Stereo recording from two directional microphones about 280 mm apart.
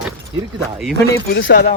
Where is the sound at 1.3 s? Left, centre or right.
Left.